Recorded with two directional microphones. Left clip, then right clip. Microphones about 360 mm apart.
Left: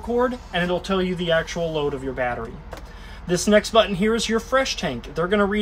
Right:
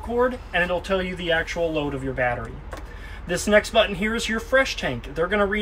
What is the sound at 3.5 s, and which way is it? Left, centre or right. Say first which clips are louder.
Speech: left 1 dB; left.